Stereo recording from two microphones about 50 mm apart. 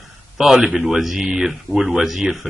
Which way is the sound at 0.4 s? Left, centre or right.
Centre.